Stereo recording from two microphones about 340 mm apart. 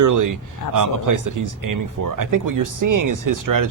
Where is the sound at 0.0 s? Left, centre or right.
Right.